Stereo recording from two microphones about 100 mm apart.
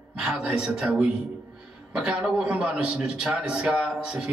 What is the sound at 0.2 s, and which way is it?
A man's voice, 10° right (ahead or behind).